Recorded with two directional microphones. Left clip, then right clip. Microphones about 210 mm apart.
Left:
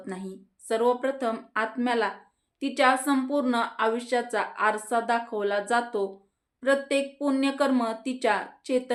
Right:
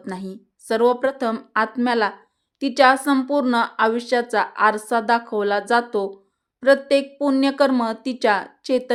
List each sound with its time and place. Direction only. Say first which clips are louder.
0.0 s a woman's voice: right 5 dB; 45° right (ahead or behind)